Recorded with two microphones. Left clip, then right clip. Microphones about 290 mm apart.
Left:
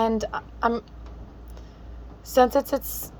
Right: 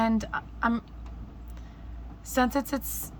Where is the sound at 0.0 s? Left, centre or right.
Centre.